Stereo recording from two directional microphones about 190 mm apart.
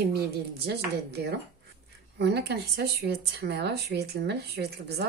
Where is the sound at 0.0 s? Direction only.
55° right (ahead or behind).